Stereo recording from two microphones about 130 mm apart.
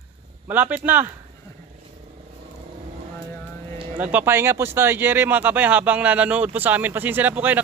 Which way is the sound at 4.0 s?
10° right (ahead or behind).